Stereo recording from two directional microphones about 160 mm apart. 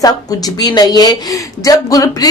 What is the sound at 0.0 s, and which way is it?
Speech, 25° left (ahead or behind).